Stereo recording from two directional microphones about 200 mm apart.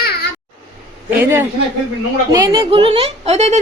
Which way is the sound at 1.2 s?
10° right (ahead or behind).